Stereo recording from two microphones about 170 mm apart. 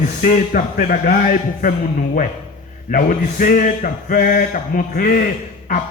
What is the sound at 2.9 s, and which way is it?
Speech, 55° left (ahead or behind).